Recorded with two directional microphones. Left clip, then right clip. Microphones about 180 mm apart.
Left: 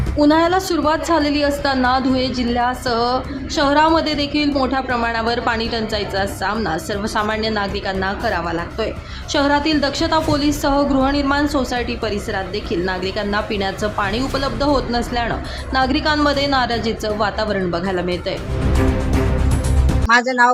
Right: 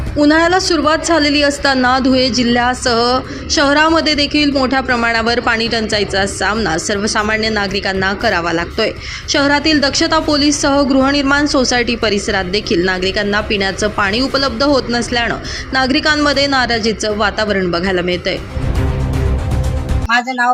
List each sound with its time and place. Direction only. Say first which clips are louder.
0.2 s a woman's voice: right 3 dB; 10° right (ahead or behind)
20.1 s speech: left 1 dB; 20° left (ahead or behind)